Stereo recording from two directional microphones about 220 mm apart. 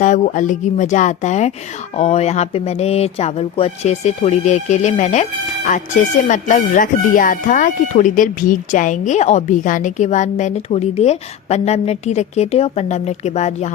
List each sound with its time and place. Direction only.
0.0 s speech: 35° left (ahead or behind)